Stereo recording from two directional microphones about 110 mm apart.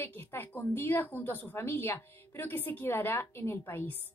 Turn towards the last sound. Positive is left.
turn(degrees=20)  # may be behind; listen again after turning